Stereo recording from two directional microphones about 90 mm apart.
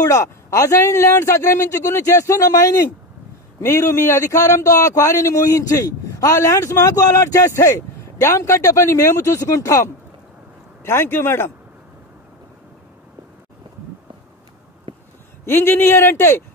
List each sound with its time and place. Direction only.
0.0 s a man's voice: 35° left (ahead or behind)
14.9 s a sound: 90° right
15.4 s a man's voice: 25° left (ahead or behind)